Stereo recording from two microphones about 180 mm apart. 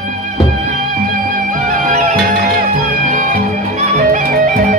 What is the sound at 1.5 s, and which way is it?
Music, 45° right (ahead or behind).